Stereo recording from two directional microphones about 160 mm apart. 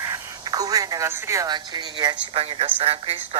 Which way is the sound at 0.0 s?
20° right (ahead or behind).